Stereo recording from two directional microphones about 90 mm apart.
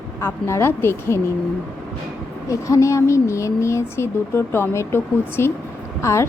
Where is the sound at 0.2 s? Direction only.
30° left (ahead or behind).